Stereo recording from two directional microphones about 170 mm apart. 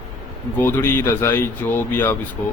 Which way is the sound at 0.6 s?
15° left (ahead or behind).